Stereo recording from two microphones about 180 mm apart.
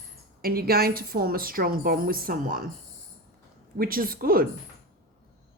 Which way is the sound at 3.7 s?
55° right (ahead or behind).